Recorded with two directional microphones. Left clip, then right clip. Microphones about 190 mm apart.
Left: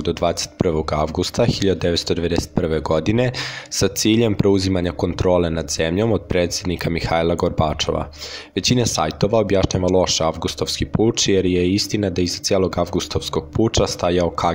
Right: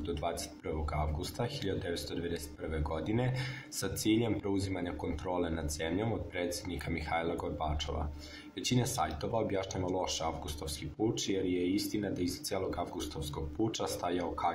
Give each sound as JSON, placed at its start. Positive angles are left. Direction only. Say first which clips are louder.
{"t": 0.0, "sound": "speech", "louder": "left 16 dB", "side_deg": 45}